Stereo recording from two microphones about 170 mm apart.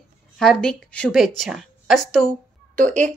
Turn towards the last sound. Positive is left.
turn(degrees=-50)  # may be behind; listen again after turning